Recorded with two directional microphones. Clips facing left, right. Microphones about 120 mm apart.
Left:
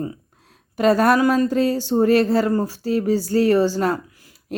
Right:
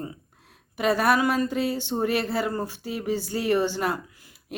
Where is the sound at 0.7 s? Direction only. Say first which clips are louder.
Left 7 dB; 40° left (ahead or behind).